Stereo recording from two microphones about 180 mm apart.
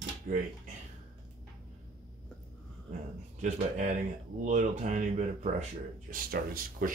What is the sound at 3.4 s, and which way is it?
Speech, 40° right (ahead or behind).